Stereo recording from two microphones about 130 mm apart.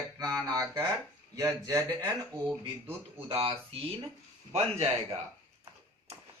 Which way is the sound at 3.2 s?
45° right (ahead or behind).